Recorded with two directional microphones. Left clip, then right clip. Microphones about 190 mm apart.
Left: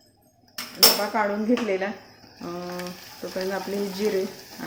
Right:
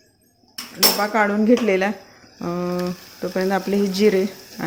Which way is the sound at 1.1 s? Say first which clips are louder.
Right 5 dB; 45° right (ahead or behind).